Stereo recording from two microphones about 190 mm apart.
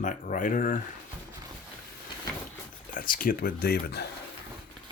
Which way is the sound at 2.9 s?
45° left (ahead or behind).